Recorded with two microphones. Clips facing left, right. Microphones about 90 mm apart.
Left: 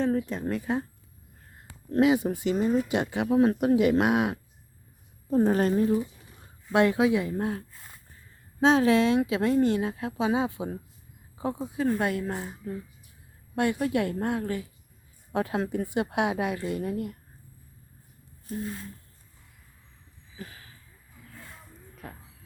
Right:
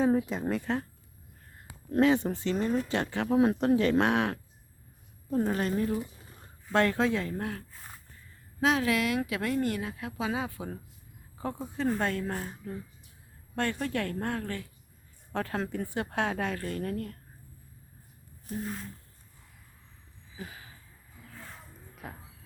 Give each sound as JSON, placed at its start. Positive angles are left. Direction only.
{"t": 0.0, "sound": "speech", "side_deg": -10}
{"t": 2.0, "sound": "speech", "side_deg": 10}
{"t": 3.2, "sound": "speech", "side_deg": 0}
{"t": 4.0, "sound": "speech", "side_deg": 10}
{"t": 5.3, "sound": "a woman's voice", "side_deg": 30}
{"t": 6.7, "sound": "speech", "side_deg": 15}
{"t": 8.6, "sound": "speech", "side_deg": 30}
{"t": 22.0, "sound": "speech", "side_deg": -5}